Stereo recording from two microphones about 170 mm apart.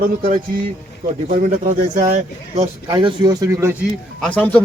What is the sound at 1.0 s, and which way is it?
Speech, 45° right (ahead or behind).